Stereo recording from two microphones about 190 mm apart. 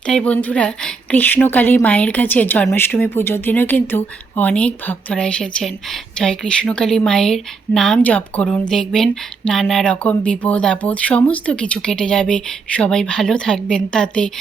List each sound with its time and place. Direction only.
0.0 s a woman's voice: 5° left (ahead or behind)